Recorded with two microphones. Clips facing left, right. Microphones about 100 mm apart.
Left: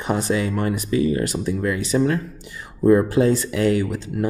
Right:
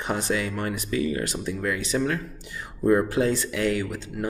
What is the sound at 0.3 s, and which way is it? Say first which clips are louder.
Speech: left 5 dB; 30° left (ahead or behind).